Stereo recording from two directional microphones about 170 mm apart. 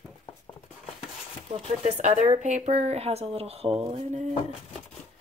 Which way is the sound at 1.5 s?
40° right (ahead or behind).